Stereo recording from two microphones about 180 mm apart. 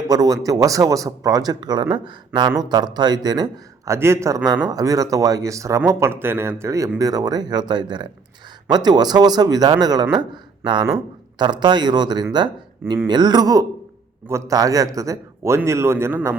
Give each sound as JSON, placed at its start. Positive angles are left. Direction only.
{"t": 0.1, "sound": "a man's voice", "side_deg": -20}